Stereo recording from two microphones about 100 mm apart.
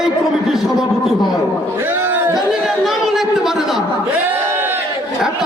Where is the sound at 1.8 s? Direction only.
20° right (ahead or behind).